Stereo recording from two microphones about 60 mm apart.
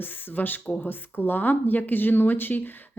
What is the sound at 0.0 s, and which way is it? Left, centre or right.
Speech, left.